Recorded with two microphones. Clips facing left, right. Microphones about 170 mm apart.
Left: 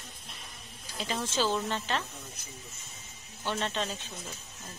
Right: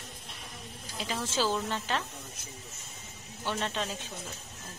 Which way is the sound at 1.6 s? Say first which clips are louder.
Even; 10° right (ahead or behind).